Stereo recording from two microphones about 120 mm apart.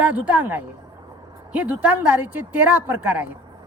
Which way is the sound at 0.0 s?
10° right (ahead or behind).